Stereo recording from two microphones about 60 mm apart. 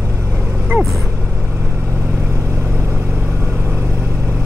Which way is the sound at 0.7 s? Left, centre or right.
Right.